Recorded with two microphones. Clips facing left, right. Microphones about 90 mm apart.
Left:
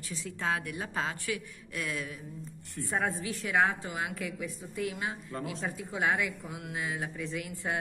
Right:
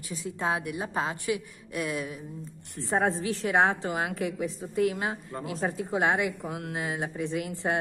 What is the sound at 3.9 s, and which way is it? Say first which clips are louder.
Speech: right 5 dB; 45° right (ahead or behind).